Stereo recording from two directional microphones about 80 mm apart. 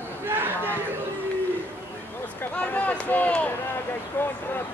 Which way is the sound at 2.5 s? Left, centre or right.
Centre.